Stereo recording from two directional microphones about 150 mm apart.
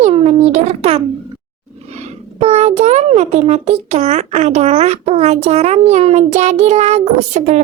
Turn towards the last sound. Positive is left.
turn(degrees=-50)  # may be behind; listen again after turning